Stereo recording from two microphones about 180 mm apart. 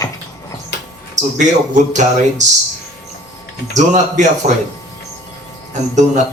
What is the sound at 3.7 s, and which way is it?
Speech, 40° right (ahead or behind).